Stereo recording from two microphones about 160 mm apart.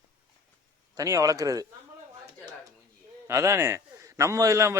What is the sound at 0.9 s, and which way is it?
Speech, 20° right (ahead or behind).